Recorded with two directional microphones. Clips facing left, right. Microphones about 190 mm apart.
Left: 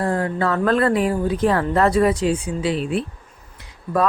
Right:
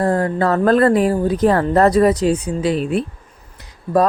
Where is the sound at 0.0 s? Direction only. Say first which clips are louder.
Right 4 dB; 40° right (ahead or behind).